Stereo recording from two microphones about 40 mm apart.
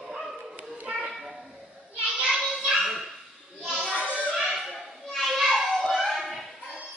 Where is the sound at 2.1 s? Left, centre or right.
Right.